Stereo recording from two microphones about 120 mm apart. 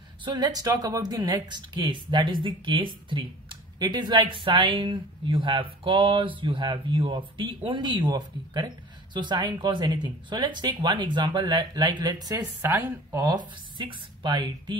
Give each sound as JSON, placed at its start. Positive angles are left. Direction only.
{"t": 0.2, "sound": "speech", "side_deg": -35}